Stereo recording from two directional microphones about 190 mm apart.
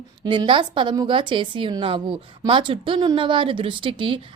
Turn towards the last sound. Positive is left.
turn(degrees=-25)  # may be behind; listen again after turning